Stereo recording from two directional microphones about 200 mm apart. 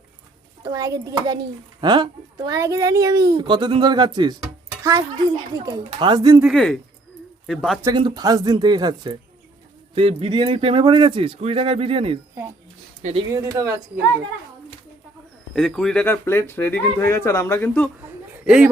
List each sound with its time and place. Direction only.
0.6 s a child's voice: 15° right (ahead or behind)
6.4 s speech: centre (ahead or behind)
7.8 s speech: 20° right (ahead or behind); by 13.2 s 35° right (ahead or behind)
13.3 s a child's voice: 15° right (ahead or behind)
15.5 s speech: centre (ahead or behind)